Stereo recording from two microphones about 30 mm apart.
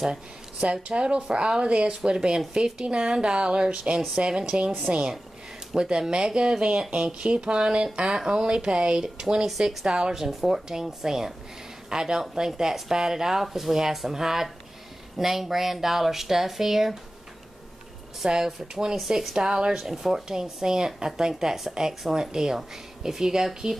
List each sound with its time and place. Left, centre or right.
0.7 s speech: right
1.9 s a woman's voice: right
3.7 s speech: right
4.2 s a woman's voice: right
10.1 s a woman's voice: centre
18.3 s a woman's voice: right
19.8 s a woman's voice: centre